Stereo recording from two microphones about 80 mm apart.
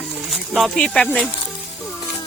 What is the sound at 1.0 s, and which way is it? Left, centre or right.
Speech, centre.